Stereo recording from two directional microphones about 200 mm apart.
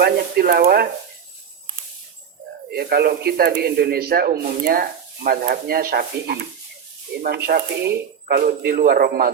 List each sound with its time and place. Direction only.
0.0 s speech: 50° right (ahead or behind)
2.7 s speech: 50° right (ahead or behind)